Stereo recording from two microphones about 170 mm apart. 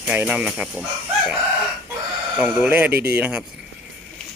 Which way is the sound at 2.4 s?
10° right (ahead or behind).